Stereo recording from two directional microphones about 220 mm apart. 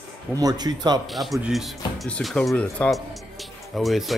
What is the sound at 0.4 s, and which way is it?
Speech, 15° right (ahead or behind).